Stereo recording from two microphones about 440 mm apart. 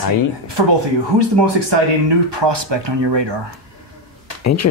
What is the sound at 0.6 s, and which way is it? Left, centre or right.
Speech, right.